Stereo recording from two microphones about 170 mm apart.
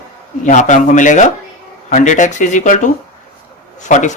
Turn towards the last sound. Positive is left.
turn(degrees=45)  # may be behind; listen again after turning